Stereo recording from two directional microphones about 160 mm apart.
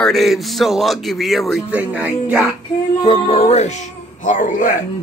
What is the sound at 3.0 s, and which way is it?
Speech, 35° left (ahead or behind).